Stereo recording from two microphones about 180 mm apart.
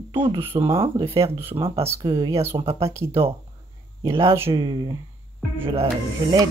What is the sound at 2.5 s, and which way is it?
Speech, 35° right (ahead or behind).